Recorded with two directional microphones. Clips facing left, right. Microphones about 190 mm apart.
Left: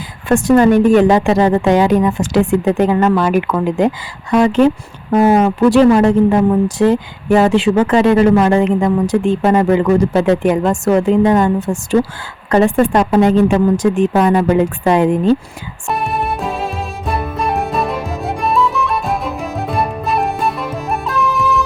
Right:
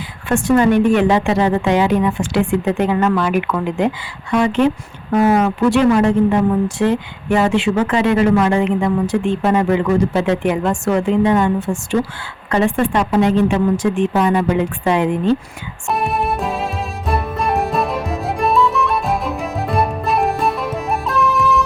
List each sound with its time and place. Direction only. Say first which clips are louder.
0.3 s speech: left 4 dB; 40° left (ahead or behind)
15.9 s music: even; centre (ahead or behind)